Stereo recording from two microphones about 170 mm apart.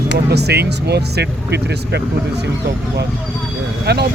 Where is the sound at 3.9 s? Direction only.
75° right (ahead or behind).